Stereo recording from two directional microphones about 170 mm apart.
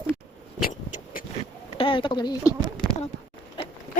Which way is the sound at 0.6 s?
55° left (ahead or behind).